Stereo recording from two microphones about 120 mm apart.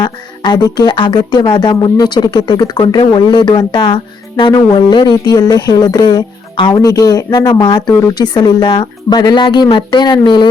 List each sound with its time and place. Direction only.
0.0 s speech: 35° left (ahead or behind)